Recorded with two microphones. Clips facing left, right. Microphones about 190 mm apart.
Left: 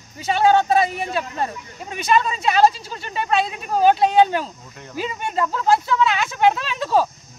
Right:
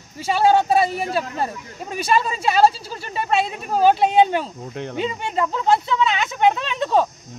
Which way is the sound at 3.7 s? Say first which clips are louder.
Even; centre (ahead or behind).